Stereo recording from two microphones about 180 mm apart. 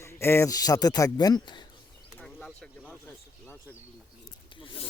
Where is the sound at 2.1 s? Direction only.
5° left (ahead or behind).